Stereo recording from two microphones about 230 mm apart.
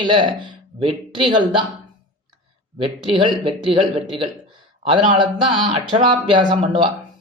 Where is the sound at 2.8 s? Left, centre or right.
Right.